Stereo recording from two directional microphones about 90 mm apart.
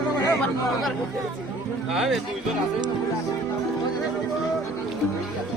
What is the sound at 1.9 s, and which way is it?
Speech, centre (ahead or behind).